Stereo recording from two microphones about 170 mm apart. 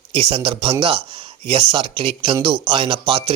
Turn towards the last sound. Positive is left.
turn(degrees=-30)  # may be behind; listen again after turning